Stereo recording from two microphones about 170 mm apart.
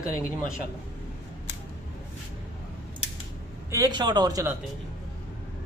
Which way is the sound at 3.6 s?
20° right (ahead or behind).